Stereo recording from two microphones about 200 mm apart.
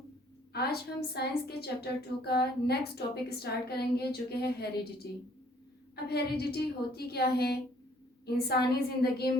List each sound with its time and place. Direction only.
0.5 s a woman's voice: 50° left (ahead or behind)
6.1 s a woman's voice: 50° left (ahead or behind)